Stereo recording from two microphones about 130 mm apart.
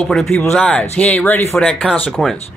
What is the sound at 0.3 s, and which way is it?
Speech, 10° left (ahead or behind).